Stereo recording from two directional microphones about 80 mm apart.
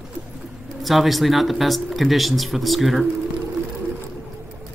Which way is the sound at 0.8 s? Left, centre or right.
Centre.